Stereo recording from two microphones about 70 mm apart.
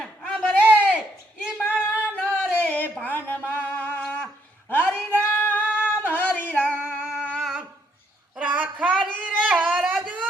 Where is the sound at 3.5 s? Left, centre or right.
Left.